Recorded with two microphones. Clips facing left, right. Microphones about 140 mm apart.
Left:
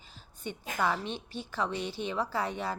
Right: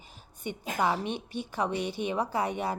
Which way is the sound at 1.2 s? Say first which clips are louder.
Right 4 dB; 55° right (ahead or behind).